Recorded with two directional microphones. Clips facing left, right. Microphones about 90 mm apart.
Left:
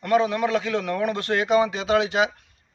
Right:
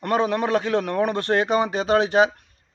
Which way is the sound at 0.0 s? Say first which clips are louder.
Left 1 dB; 40° right (ahead or behind).